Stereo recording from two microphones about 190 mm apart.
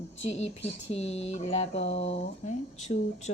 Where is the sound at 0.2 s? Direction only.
35° left (ahead or behind).